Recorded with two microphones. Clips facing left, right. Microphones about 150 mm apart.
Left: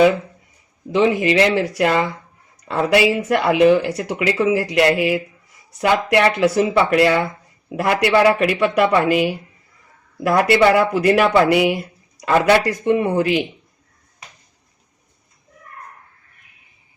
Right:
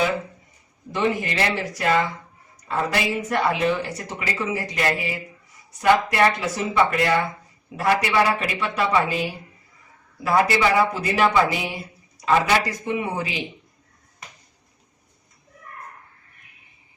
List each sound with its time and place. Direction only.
0.9 s speech: 80° left
12.2 s speech: 65° left (ahead or behind)